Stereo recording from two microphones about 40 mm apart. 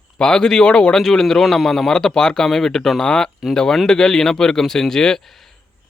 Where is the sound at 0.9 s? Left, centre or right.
Centre.